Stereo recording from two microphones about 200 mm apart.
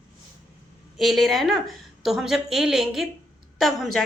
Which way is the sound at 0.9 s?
Centre (ahead or behind).